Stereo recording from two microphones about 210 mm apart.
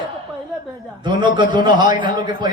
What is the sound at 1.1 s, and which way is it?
A man's voice, 20° right (ahead or behind).